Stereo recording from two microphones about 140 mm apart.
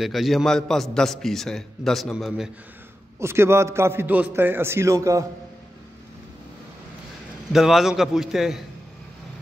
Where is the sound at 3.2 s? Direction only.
20° right (ahead or behind).